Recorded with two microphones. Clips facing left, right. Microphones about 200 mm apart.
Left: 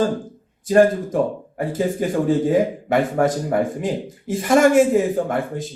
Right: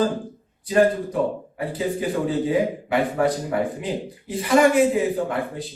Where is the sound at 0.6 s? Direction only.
45° left (ahead or behind).